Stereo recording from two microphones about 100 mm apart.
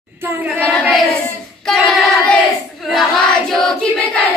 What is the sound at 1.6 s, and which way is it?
Child singing, 5° left (ahead or behind).